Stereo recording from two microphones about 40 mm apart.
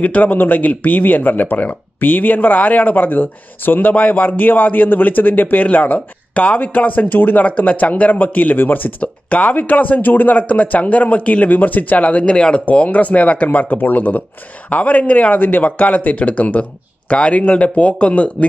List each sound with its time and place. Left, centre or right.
0.0 s speech: left
3.9 s speech: left
7.1 s speech: left
8.5 s speech: left
9.0 s speech: left
12.4 s speech: left
12.6 s speech: left
15.3 s speech: left